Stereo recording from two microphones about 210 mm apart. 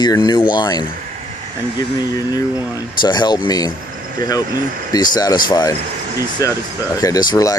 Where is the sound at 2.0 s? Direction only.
15° left (ahead or behind).